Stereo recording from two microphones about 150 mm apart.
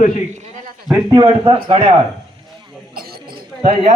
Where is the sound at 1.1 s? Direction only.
35° right (ahead or behind).